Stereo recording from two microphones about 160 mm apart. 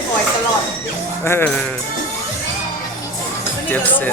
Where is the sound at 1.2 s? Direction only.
10° left (ahead or behind).